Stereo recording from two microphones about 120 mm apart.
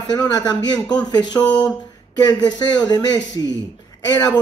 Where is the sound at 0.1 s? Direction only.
35° left (ahead or behind).